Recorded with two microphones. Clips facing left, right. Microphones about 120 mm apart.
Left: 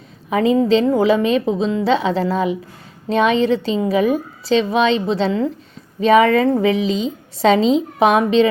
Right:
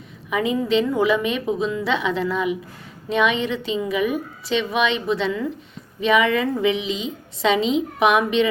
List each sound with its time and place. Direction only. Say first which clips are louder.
0.3 s a woman's voice: left 7 dB; 35° left (ahead or behind)